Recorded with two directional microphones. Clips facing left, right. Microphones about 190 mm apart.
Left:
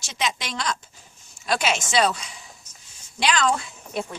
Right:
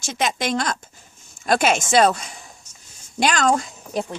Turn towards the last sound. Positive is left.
turn(degrees=-40)  # may be behind; listen again after turning